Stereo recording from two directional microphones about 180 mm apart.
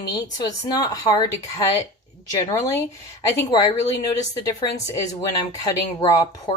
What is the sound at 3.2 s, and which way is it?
A woman's voice, 20° left (ahead or behind).